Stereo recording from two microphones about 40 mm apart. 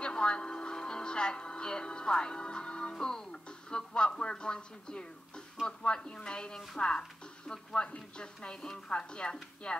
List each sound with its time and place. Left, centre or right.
0.0 s speech: left
5.6 s speech: centre
5.9 s speech: left